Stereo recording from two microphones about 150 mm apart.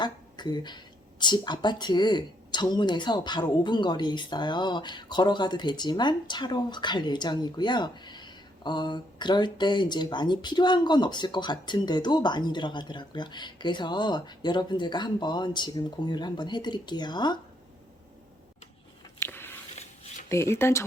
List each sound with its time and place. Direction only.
0.0 s a sound: 30° left (ahead or behind)
1.2 s a woman's voice: 30° left (ahead or behind)
19.2 s biting: 15° left (ahead or behind)
20.3 s speech: 15° left (ahead or behind)